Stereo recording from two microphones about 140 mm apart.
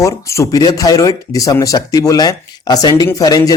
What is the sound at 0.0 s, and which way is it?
Speech, 20° left (ahead or behind).